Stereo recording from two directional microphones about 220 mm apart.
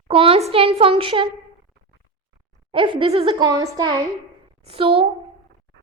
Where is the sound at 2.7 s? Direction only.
25° right (ahead or behind).